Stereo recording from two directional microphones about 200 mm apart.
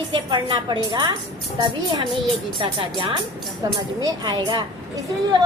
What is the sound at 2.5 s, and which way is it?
A woman's voice, 25° right (ahead or behind).